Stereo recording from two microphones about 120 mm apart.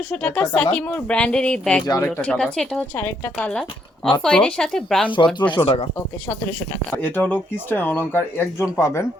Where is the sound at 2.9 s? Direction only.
20° left (ahead or behind).